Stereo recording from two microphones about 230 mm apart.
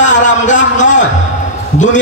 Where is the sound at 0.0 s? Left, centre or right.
Left.